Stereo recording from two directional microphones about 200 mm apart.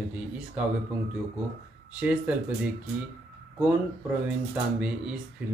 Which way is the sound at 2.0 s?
5° right (ahead or behind).